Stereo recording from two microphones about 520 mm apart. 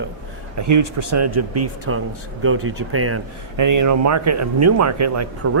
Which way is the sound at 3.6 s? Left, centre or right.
Right.